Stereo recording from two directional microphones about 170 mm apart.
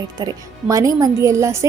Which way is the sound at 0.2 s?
20° right (ahead or behind).